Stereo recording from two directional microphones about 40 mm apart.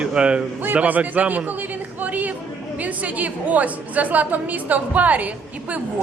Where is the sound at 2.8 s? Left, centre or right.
Right.